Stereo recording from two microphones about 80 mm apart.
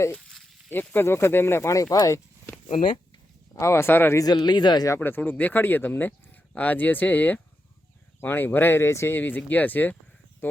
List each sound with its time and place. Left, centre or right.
0.7 s speech: left
3.6 s speech: left
4.2 s speech: left
4.9 s speech: left